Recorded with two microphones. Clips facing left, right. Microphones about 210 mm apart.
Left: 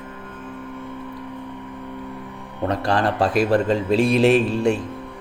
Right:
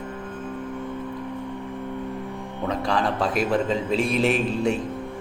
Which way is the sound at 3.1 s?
35° left (ahead or behind).